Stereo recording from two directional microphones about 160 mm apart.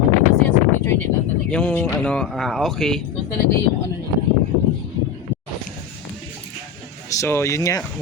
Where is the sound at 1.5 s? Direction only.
5° left (ahead or behind).